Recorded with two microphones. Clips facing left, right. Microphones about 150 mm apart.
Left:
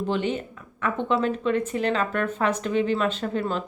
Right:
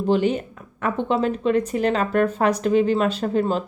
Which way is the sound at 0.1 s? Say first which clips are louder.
Right 9 dB; 40° right (ahead or behind).